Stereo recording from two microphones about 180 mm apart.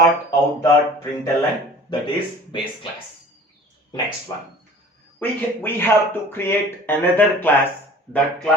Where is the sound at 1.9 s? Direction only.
25° left (ahead or behind).